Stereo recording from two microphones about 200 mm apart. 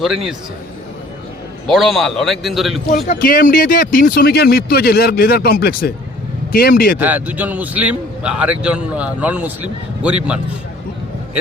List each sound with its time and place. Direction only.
0.0 s a man's voice: centre (ahead or behind)
1.6 s a man's voice: centre (ahead or behind)
3.1 s speech: 45° left (ahead or behind)
7.0 s speech: 10° right (ahead or behind)